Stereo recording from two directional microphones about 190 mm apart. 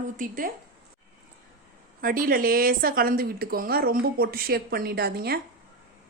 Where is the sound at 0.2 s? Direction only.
45° right (ahead or behind).